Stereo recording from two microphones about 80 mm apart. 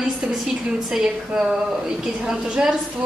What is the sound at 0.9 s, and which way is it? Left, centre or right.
A woman's voice, centre.